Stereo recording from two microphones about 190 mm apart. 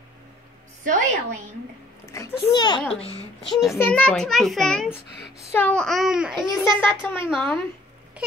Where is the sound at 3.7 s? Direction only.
10° left (ahead or behind).